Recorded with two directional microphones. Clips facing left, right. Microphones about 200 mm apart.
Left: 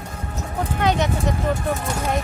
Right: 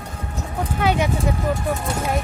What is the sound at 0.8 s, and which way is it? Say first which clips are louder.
Vehicle: right 1 dB; 10° right (ahead or behind).